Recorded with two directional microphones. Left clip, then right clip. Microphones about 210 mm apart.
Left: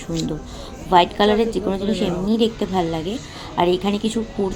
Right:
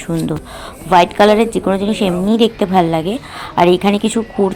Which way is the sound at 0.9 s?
25° right (ahead or behind).